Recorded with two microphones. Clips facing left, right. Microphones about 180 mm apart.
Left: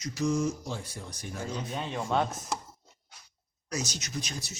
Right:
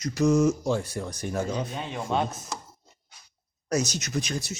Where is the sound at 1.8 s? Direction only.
5° right (ahead or behind).